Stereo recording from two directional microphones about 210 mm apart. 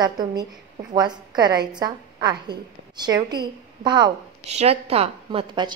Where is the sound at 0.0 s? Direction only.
20° right (ahead or behind).